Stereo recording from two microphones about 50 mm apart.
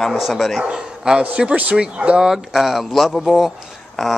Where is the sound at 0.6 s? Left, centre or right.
Centre.